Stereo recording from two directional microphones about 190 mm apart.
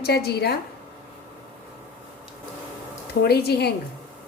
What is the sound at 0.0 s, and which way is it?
Speech, 55° left (ahead or behind).